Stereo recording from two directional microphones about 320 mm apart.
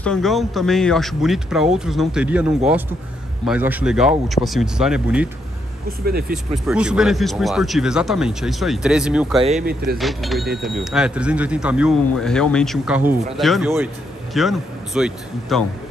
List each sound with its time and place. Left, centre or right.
0.0 s speech: centre
6.0 s speech: right
6.3 s speech: centre